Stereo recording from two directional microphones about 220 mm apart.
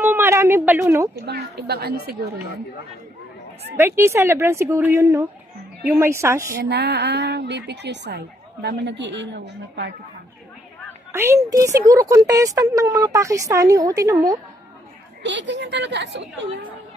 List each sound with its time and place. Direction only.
0.0 s a woman's voice: 10° right (ahead or behind)
1.2 s a woman's voice: 45° right (ahead or behind)
3.7 s a woman's voice: 10° right (ahead or behind)
6.6 s a woman's voice: 50° right (ahead or behind)
11.1 s a woman's voice: 10° right (ahead or behind)
15.2 s a woman's voice: 55° right (ahead or behind)